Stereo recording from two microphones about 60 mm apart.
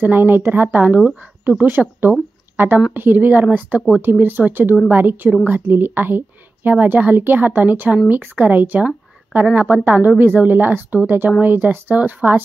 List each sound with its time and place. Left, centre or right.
0.0 s a woman's voice: right
9.8 s a woman's voice: right